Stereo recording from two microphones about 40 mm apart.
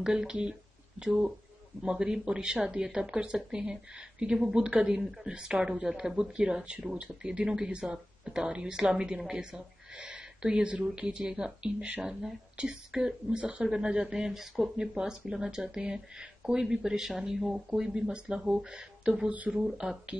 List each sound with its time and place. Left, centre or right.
0.0 s speech: centre
12.6 s speech: right
12.9 s speech: centre